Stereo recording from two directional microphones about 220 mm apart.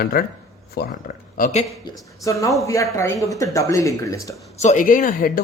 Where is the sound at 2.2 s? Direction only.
15° left (ahead or behind).